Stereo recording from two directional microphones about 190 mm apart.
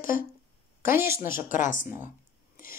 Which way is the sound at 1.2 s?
45° left (ahead or behind).